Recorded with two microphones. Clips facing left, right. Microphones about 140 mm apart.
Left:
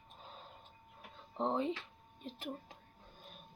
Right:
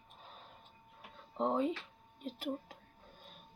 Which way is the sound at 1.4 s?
10° right (ahead or behind).